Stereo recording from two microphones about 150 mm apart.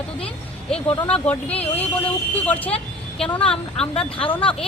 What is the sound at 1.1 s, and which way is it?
Speech, 10° left (ahead or behind).